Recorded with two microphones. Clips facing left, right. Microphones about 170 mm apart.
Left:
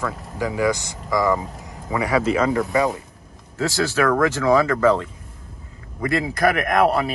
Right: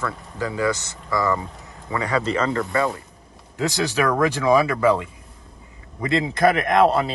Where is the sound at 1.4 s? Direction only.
5° left (ahead or behind).